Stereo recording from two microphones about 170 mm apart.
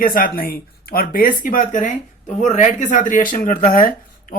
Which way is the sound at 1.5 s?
50° left (ahead or behind).